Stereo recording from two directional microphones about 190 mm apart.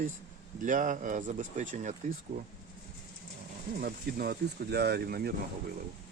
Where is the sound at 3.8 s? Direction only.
50° right (ahead or behind).